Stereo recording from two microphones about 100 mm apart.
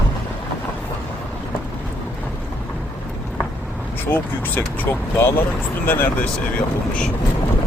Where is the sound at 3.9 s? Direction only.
20° left (ahead or behind).